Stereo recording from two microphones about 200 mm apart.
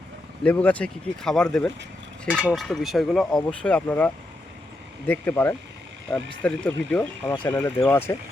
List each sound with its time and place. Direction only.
0.4 s speech: 5° left (ahead or behind)